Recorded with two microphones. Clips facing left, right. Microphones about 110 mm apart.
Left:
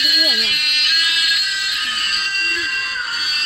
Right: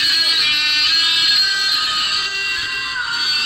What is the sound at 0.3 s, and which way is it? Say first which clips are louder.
Music: right 1 dB; 90° right.